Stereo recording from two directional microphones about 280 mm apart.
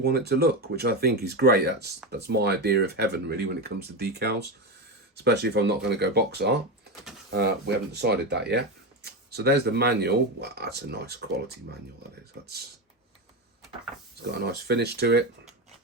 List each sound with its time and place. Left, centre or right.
0.0 s speech: right
14.3 s speech: right